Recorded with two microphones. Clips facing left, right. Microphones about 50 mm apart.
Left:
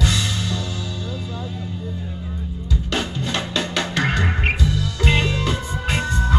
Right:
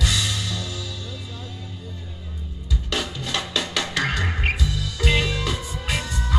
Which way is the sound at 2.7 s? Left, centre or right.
Left.